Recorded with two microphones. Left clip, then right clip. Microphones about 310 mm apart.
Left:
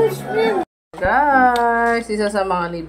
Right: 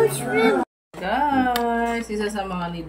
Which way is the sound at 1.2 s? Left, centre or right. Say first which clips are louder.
Left 6 dB; left.